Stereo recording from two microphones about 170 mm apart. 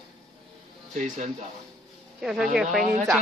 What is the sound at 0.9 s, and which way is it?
Speech, 50° right (ahead or behind).